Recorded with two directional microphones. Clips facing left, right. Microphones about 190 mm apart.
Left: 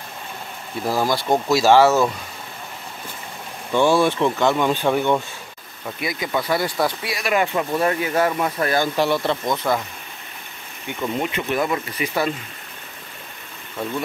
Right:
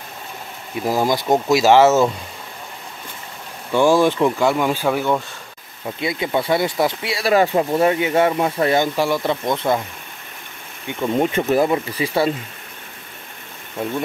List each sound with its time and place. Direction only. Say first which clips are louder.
0.7 s speech: right 2 dB; 15° right (ahead or behind)
3.7 s speech: right 2 dB; 15° right (ahead or behind)
5.9 s speech: right 3 dB; 25° right (ahead or behind)
8.9 s speech: right 1 dB; 10° right (ahead or behind)
11.1 s speech: right 7 dB; 40° right (ahead or behind)